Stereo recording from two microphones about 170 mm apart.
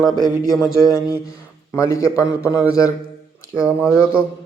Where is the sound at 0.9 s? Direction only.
20° left (ahead or behind).